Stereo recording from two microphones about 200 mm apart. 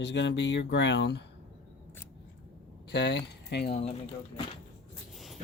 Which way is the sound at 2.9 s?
60° left (ahead or behind).